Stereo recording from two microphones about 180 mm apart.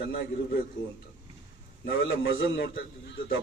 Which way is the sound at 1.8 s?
80° left.